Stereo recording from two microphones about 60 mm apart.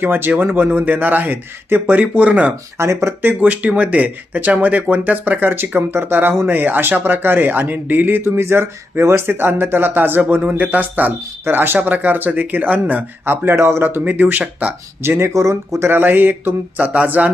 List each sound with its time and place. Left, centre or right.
0.0 s a man's voice: right
2.7 s a man's voice: right
13.2 s speech: right
13.8 s a man's voice: right
15.0 s speech: right
15.3 s speech: right
15.9 s speech: right